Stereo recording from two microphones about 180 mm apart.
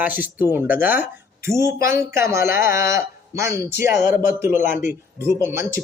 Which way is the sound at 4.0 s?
45° left (ahead or behind).